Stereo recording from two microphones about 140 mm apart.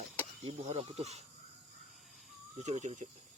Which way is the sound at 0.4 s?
45° right (ahead or behind).